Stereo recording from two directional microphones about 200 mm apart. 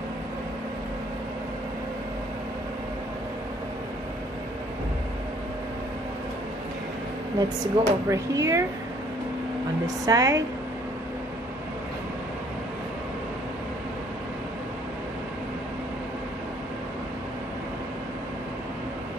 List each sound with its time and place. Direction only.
7.3 s speech: 20° right (ahead or behind)
9.8 s speech: 15° right (ahead or behind)